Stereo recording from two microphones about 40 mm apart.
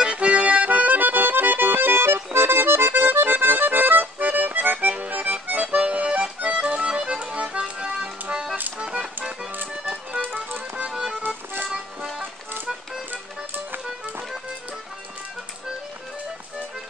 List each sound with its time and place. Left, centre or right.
0.0 s accordion: right
8.0 s music: right
8.7 s accordion: right
9.0 s accordion: centre
10.9 s music: centre
11.2 s music: right